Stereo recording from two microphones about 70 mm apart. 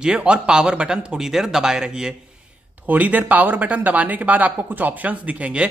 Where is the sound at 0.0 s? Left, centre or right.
Centre.